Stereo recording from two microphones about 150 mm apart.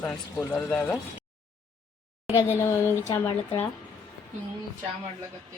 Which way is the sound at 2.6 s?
15° left (ahead or behind).